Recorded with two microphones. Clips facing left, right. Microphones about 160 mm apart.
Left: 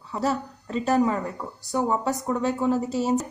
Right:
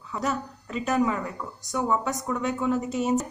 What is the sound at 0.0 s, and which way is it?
A woman's voice, 30° left (ahead or behind).